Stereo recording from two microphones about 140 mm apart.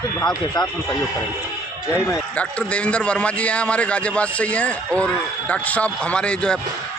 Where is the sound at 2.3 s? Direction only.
10° left (ahead or behind).